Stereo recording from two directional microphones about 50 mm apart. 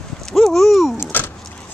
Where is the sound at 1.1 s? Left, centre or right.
Left.